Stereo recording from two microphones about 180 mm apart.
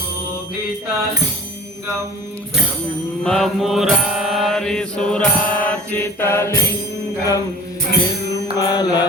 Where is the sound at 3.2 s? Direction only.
Centre (ahead or behind).